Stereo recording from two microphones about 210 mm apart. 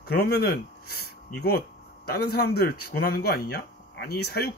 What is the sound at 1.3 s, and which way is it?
Speech, 50° left (ahead or behind).